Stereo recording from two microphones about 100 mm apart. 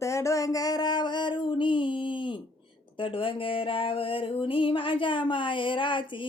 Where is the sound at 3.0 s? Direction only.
60° left (ahead or behind).